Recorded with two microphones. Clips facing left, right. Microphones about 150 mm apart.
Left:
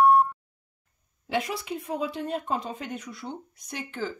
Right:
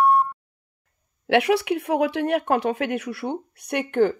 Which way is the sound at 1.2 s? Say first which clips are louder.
Right 10 dB; 70° right (ahead or behind).